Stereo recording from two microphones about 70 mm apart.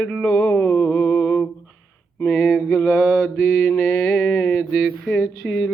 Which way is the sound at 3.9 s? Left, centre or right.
Centre.